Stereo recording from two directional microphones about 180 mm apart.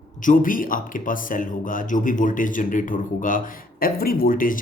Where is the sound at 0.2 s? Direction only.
50° left (ahead or behind).